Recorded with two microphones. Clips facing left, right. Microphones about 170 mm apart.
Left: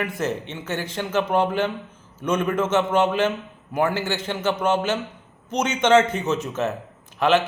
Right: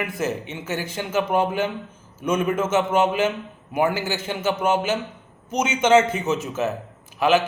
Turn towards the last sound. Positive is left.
turn(degrees=-5)  # may be behind; listen again after turning